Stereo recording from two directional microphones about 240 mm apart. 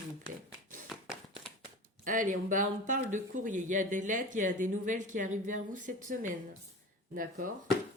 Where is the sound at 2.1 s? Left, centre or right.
Right.